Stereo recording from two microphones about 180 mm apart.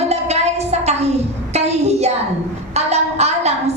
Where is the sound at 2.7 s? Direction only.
35° right (ahead or behind).